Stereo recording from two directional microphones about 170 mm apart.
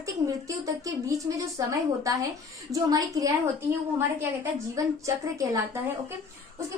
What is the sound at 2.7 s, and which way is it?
A woman's voice, 20° right (ahead or behind).